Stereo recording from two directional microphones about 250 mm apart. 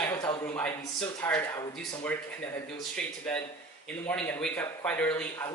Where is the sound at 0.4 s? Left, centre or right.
Centre.